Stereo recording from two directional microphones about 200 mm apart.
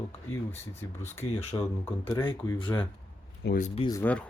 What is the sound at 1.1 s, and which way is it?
Speech, 35° left (ahead or behind).